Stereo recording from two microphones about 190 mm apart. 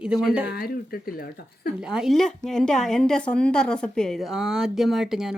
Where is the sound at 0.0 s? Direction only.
5° right (ahead or behind).